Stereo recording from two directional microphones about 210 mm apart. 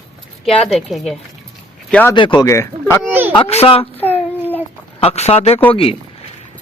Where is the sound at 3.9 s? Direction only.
10° left (ahead or behind).